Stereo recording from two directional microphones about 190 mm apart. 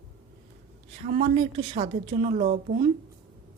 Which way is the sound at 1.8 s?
40° right (ahead or behind).